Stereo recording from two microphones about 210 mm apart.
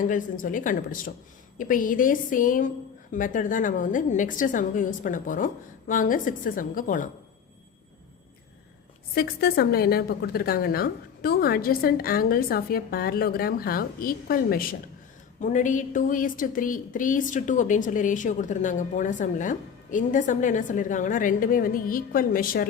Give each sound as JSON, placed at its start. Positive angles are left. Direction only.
{"t": 0.0, "sound": "a woman's voice", "side_deg": 40}
{"t": 9.1, "sound": "a woman's voice", "side_deg": 50}